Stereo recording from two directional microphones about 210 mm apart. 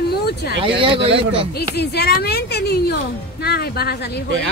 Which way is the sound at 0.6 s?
25° right (ahead or behind).